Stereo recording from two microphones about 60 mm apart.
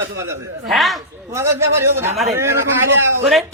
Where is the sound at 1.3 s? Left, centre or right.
Right.